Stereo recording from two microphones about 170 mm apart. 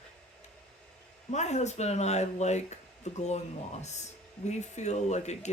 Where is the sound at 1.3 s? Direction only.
40° left (ahead or behind).